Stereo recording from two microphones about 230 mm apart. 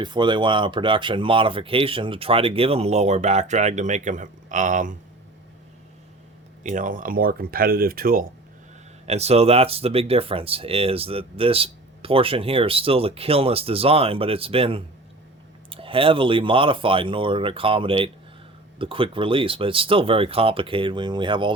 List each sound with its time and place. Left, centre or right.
0.0 s speech: centre
6.6 s speech: right
9.0 s speech: right